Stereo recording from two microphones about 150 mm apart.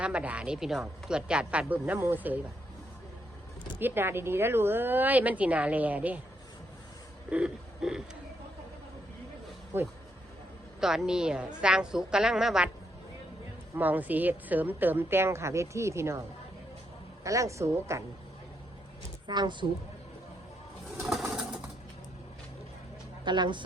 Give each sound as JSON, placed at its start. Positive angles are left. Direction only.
{"t": 0.0, "sound": "a woman's voice", "side_deg": -10}
{"t": 3.8, "sound": "a woman's voice", "side_deg": -15}
{"t": 7.3, "sound": "a sound", "side_deg": -5}
{"t": 9.7, "sound": "a woman's voice", "side_deg": -15}
{"t": 10.8, "sound": "a woman's voice", "side_deg": -5}
{"t": 13.7, "sound": "a woman's voice", "side_deg": -10}
{"t": 17.2, "sound": "a woman's voice", "side_deg": -20}
{"t": 19.3, "sound": "a woman's voice", "side_deg": -30}
{"t": 21.2, "sound": "pigeon", "side_deg": -5}
{"t": 23.2, "sound": "speech", "side_deg": -30}